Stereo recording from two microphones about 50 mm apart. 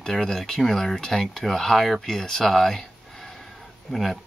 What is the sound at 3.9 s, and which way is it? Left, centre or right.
Speech, centre.